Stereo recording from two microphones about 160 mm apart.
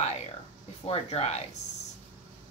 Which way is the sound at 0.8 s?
40° left (ahead or behind).